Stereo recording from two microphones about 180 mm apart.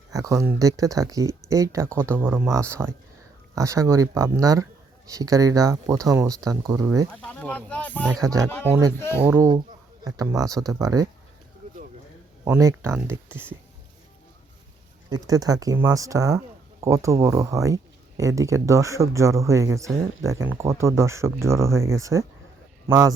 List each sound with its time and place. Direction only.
0.1 s speech: 20° right (ahead or behind)
7.1 s speech: 5° left (ahead or behind)
8.2 s speech: 20° right (ahead or behind)
8.4 s speech: 10° left (ahead or behind)
9.2 s speech: 10° right (ahead or behind)
12.5 s speech: 15° right (ahead or behind)
15.1 s speech: 20° right (ahead or behind)